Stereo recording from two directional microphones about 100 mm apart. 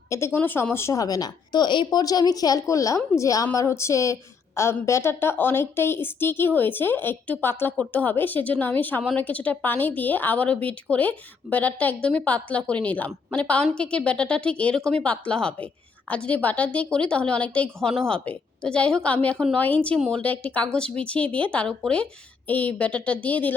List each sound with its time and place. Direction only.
0.1 s a woman's voice: 25° left (ahead or behind)
1.0 s a woman's voice: 40° left (ahead or behind); by 23.6 s 15° left (ahead or behind)